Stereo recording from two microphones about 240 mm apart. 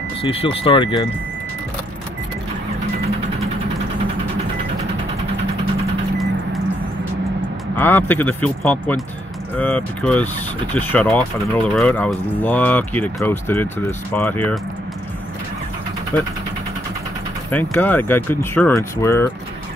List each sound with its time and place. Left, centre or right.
0.2 s speech: left
7.7 s speech: centre
17.5 s speech: centre